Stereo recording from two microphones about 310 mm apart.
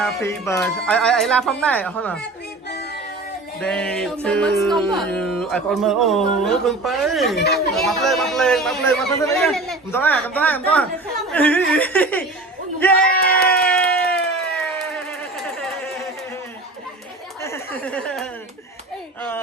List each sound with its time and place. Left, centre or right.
0.0 s a man's voice: centre
3.6 s a man's voice: centre
7.3 s speech: left
7.7 s a man's voice: centre
13.1 s speech: left
13.5 s a sound: centre
17.4 s a sound: centre